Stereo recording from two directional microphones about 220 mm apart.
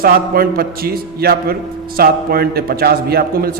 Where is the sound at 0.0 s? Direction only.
45° right (ahead or behind).